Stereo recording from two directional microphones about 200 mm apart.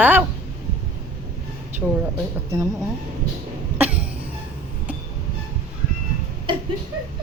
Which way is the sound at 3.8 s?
5° right (ahead or behind).